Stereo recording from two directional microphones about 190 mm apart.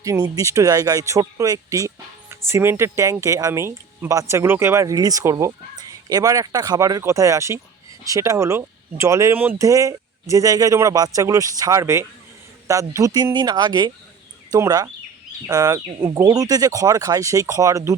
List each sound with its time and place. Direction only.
0.0 s speech: 15° right (ahead or behind)